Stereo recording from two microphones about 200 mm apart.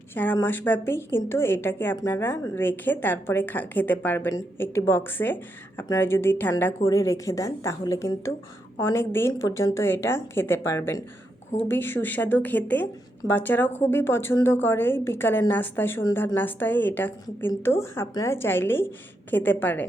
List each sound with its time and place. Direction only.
0.1 s a woman's voice: 10° left (ahead or behind)